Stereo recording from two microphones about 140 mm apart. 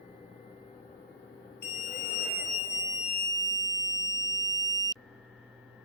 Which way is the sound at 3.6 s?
25° left (ahead or behind).